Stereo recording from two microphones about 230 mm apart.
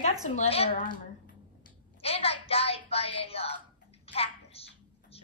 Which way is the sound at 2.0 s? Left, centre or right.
Left.